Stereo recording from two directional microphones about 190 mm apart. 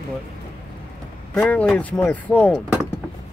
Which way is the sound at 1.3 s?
5° left (ahead or behind).